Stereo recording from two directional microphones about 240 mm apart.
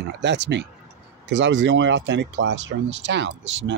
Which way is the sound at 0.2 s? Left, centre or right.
Right.